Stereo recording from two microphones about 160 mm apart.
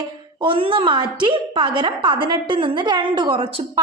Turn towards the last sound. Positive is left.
turn(degrees=-30)  # may be behind; listen again after turning